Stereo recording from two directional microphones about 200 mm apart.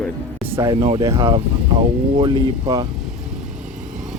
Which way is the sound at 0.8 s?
30° right (ahead or behind).